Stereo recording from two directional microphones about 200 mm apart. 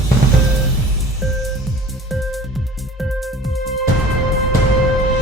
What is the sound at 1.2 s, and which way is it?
Music, centre (ahead or behind).